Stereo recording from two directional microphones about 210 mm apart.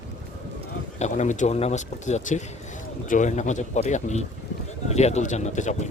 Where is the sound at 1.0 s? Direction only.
35° left (ahead or behind).